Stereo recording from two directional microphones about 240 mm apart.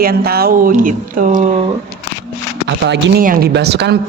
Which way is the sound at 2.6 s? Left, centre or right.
Right.